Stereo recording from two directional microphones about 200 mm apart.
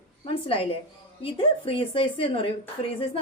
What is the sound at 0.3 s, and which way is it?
A woman's voice, 25° left (ahead or behind).